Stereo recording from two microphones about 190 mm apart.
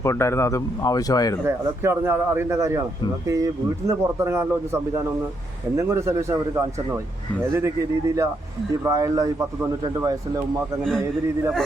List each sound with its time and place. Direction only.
0.0 s speech: 15° left (ahead or behind)
1.5 s speech: 15° right (ahead or behind)